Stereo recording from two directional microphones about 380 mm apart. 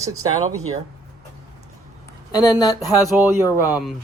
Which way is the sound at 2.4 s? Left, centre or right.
Centre.